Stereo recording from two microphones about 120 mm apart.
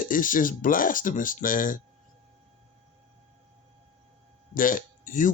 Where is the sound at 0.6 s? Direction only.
90° left.